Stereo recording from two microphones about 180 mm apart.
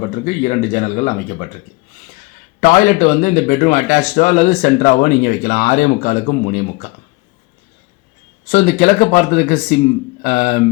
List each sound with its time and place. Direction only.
0.1 s speech: 45° left (ahead or behind)
2.6 s speech: 45° left (ahead or behind)
8.4 s speech: 40° left (ahead or behind)